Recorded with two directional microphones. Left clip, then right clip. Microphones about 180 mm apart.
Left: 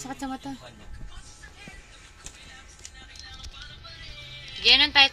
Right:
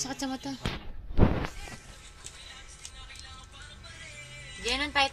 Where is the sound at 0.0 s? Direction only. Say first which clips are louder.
Even; 15° left (ahead or behind).